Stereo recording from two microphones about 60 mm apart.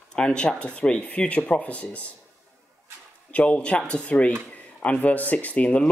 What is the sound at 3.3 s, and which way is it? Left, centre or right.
Speech, left.